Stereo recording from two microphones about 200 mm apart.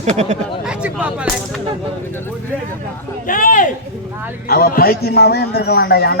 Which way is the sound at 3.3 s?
40° left (ahead or behind).